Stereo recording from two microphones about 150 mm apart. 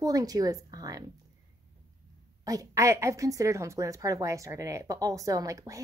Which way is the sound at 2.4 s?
25° right (ahead or behind).